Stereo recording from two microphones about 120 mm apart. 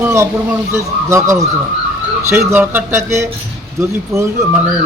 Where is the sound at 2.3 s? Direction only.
20° right (ahead or behind).